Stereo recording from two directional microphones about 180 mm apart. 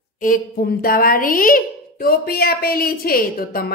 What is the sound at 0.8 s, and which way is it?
A woman's voice, 55° left (ahead or behind).